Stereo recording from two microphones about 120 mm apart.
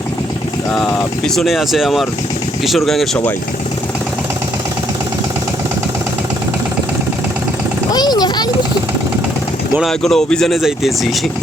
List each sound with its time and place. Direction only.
0.7 s speech: 5° left (ahead or behind)
7.9 s vehicle: 35° left (ahead or behind)
9.8 s speech: 5° left (ahead or behind)